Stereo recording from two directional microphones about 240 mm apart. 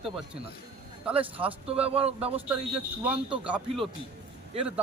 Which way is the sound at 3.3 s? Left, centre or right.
Centre.